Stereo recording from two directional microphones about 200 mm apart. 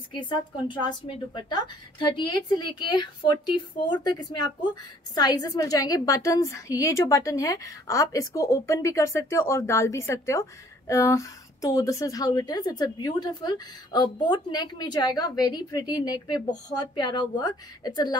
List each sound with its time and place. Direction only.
0.2 s a woman's voice: 25° left (ahead or behind)